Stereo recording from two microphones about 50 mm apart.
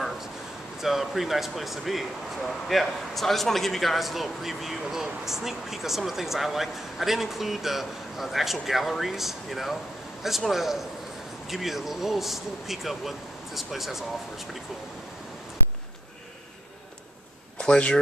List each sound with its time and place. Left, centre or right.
0.7 s a man's voice: centre
17.6 s speech: left